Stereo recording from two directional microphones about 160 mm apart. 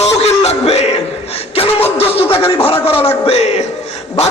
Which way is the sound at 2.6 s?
35° left (ahead or behind).